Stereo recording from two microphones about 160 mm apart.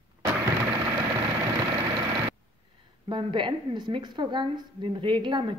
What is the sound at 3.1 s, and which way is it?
A woman's voice, 30° right (ahead or behind).